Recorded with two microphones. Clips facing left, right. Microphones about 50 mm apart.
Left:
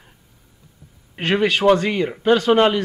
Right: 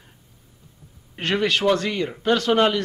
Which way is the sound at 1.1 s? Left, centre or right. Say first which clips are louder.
Left 3 dB; centre.